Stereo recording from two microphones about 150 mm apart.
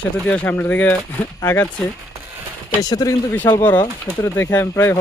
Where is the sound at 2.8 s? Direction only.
25° left (ahead or behind).